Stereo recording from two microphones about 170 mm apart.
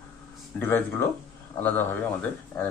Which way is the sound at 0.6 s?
15° left (ahead or behind).